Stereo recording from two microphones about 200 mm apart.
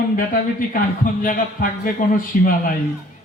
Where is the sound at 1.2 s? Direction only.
40° left (ahead or behind).